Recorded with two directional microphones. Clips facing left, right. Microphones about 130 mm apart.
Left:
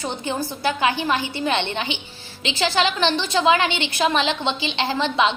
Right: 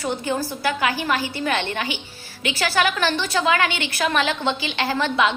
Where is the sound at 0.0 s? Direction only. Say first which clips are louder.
Right 2 dB; 25° left (ahead or behind).